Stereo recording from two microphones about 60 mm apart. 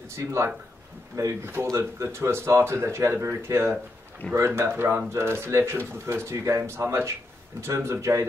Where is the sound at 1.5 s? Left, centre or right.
Right.